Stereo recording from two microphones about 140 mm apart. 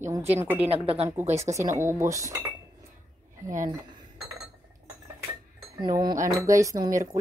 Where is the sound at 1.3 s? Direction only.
20° right (ahead or behind).